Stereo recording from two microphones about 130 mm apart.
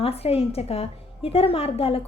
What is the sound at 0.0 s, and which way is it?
A woman's voice, 50° left (ahead or behind).